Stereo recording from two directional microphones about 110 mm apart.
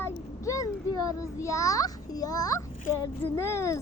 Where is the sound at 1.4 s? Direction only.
30° left (ahead or behind).